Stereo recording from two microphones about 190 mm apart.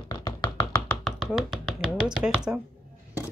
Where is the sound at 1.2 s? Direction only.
Centre (ahead or behind).